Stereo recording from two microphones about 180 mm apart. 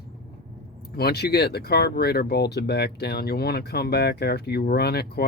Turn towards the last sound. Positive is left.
turn(degrees=60)  # may be behind; listen again after turning